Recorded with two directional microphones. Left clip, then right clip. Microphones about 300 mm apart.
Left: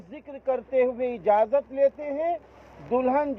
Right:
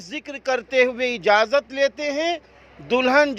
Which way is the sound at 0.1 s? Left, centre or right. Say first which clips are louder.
Right 4 dB; right.